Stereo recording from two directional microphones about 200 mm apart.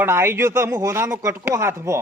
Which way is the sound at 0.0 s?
10° right (ahead or behind).